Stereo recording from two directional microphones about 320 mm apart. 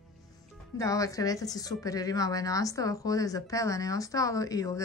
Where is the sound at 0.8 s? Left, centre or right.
Centre.